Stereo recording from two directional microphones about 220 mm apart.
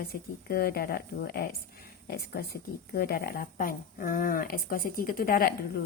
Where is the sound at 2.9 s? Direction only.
45° left (ahead or behind).